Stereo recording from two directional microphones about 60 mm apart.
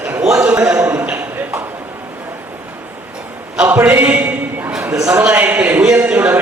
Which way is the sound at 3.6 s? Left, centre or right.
Right.